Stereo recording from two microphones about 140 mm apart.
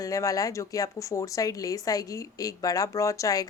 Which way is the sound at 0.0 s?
25° left (ahead or behind).